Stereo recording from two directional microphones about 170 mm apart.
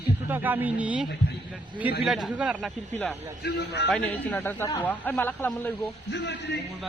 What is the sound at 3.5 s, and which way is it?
Speech, 80° left.